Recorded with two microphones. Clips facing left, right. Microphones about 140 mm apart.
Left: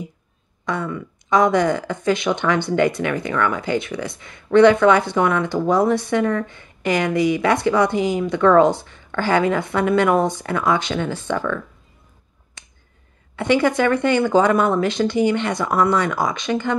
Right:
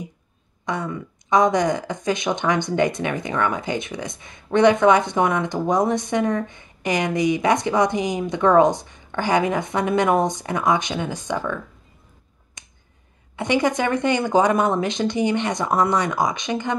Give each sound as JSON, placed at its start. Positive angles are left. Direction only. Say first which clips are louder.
{"t": 0.7, "sound": "speech", "louder": "left 2 dB", "side_deg": -20}
{"t": 12.6, "sound": "finger snapping", "louder": "left 1 dB", "side_deg": -15}
{"t": 13.4, "sound": "speech", "louder": "left 3 dB", "side_deg": -20}